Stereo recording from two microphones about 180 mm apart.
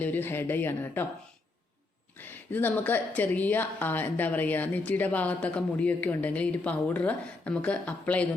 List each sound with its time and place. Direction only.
0.0 s a woman's voice: 10° left (ahead or behind)
2.1 s a woman's voice: 10° left (ahead or behind)